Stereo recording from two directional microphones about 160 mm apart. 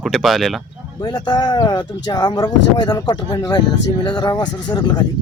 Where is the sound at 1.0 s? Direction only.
25° left (ahead or behind).